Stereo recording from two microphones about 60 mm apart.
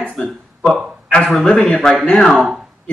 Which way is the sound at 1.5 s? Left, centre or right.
Centre.